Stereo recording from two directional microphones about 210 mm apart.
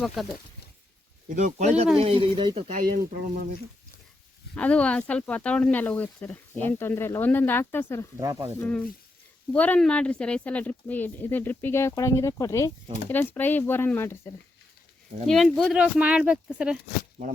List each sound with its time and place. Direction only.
0.0 s speech: centre (ahead or behind)
1.3 s speech: 35° right (ahead or behind)
2.8 s speech: 45° right (ahead or behind)
4.5 s speech: 5° left (ahead or behind)
8.2 s speech: 15° right (ahead or behind)
8.5 s speech: 5° left (ahead or behind)
15.3 s speech: centre (ahead or behind)